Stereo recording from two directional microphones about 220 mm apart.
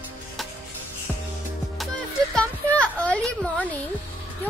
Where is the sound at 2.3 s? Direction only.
5° left (ahead or behind).